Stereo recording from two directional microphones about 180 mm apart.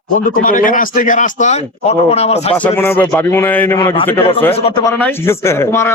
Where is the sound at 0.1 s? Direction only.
50° left (ahead or behind).